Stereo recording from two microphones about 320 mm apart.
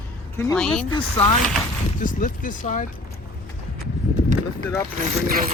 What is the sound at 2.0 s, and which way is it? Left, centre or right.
Speech, left.